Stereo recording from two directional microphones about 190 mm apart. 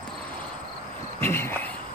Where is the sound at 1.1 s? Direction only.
10° left (ahead or behind).